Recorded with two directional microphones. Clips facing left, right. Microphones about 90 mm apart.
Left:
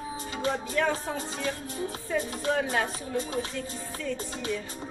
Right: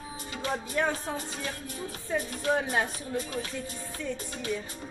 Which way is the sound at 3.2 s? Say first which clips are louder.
Left 3 dB; 30° left (ahead or behind).